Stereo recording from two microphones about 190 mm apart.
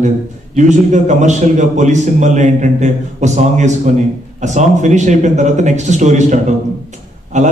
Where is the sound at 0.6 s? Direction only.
40° right (ahead or behind).